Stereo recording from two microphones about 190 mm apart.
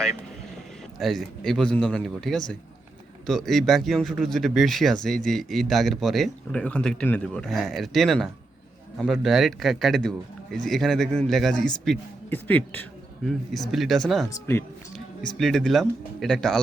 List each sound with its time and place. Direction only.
0.9 s a man's voice: centre (ahead or behind)
14.3 s speech: 15° left (ahead or behind)
15.4 s a man's voice: centre (ahead or behind)